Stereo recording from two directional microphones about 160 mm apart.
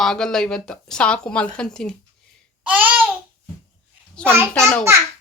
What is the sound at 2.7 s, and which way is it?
Babbling, 10° right (ahead or behind).